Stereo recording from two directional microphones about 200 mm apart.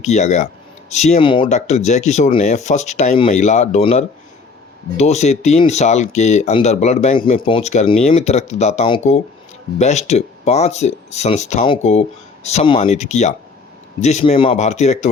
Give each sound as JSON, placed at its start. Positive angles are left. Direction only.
{"t": 0.0, "sound": "speech", "side_deg": 35}
{"t": 1.5, "sound": "speech", "side_deg": 35}